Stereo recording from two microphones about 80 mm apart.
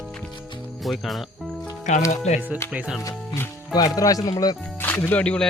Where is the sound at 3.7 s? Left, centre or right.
Left.